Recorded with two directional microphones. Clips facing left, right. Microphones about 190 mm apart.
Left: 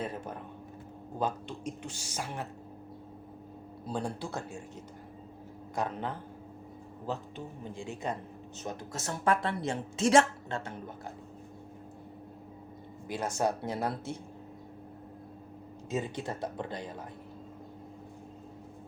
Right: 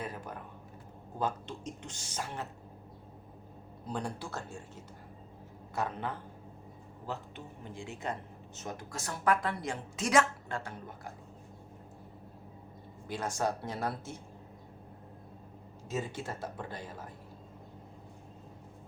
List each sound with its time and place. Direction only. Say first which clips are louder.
0.0 s a sound: left 4 dB; 25° left (ahead or behind)
1.2 s speech: left 2 dB; 10° left (ahead or behind)
3.8 s speech: left 2 dB; 15° left (ahead or behind)
5.7 s speech: left 1 dB; 15° left (ahead or behind)
8.0 s a woman's voice: left 2 dB; 15° left (ahead or behind)
13.1 s a woman's voice: left 3 dB; 20° left (ahead or behind)
15.9 s a woman's voice: left 2 dB; 20° left (ahead or behind)